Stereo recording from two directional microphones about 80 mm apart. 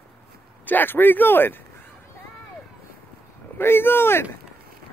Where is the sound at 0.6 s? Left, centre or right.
Left.